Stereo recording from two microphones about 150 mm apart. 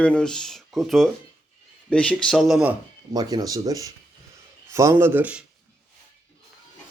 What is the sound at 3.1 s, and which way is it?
Speech, 25° right (ahead or behind).